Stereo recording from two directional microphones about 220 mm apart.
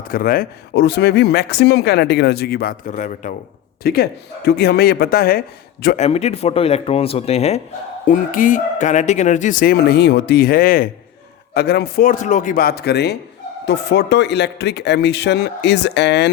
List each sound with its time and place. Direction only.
0.1 s speech: 40° left (ahead or behind)
3.8 s speech: 45° left (ahead or behind)
6.0 s speech: 30° left (ahead or behind); by 16.3 s 50° left (ahead or behind)